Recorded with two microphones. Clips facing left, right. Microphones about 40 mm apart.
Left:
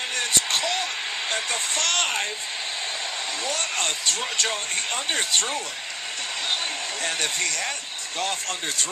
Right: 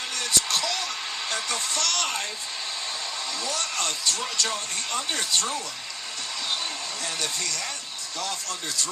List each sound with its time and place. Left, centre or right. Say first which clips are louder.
0.2 s speech: left 1 dB; left
3.4 s speech: left 2 dB; left
7.0 s speech: left 5 dB; left